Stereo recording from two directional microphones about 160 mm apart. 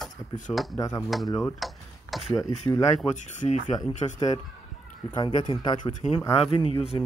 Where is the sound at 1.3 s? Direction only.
20° left (ahead or behind).